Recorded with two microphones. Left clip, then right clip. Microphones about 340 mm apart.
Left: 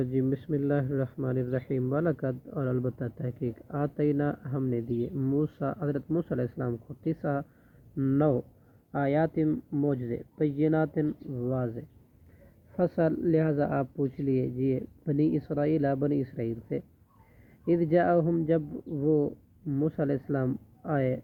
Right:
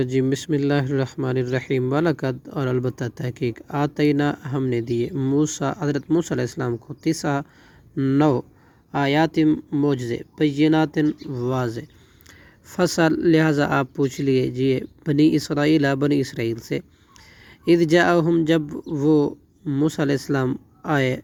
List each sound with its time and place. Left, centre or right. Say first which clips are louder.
0.0 s speech: right 8 dB; centre